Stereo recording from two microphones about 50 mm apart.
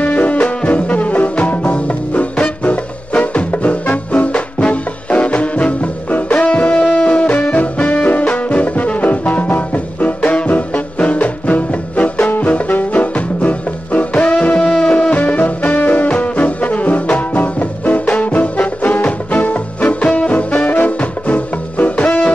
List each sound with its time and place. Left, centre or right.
0.0 s music: left
14.6 s music: centre
14.9 s music: left
16.1 s brass instrument: left